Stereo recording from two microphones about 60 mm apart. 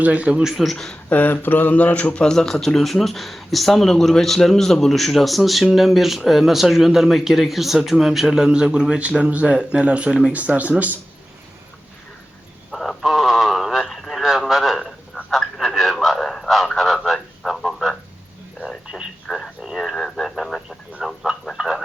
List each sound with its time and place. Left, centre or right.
0.0 s speech: right
0.4 s speech: centre
1.1 s speech: left
2.2 s speech: centre; by 10.9 s right
12.7 s radio: centre
19.3 s a sound: centre
19.7 s radio: centre
21.0 s a sound: centre